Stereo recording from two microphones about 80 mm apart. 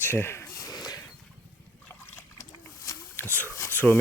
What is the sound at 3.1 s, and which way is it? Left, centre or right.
Speech, left.